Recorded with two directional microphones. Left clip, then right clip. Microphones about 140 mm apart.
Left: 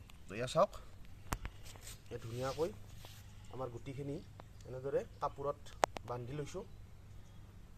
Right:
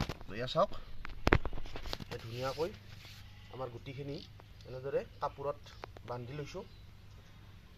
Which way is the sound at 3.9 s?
10° left (ahead or behind).